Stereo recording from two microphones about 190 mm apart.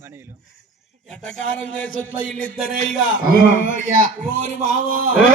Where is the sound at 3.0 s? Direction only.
90° left.